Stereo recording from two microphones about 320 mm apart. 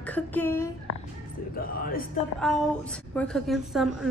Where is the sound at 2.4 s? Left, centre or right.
Centre.